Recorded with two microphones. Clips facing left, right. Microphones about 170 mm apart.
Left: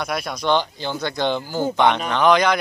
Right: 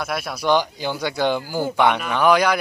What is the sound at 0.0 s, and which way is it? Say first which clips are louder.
Speech: even; 5° right (ahead or behind).